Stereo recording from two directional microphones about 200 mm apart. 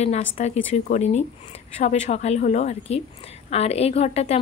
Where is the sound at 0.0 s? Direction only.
35° left (ahead or behind).